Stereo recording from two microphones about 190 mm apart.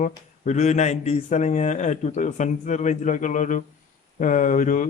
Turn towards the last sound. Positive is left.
turn(degrees=40)  # may be behind; listen again after turning